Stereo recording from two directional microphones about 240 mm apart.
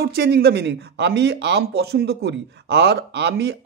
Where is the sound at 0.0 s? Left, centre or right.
Right.